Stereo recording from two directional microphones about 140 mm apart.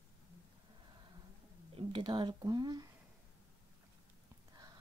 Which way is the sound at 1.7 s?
35° right (ahead or behind).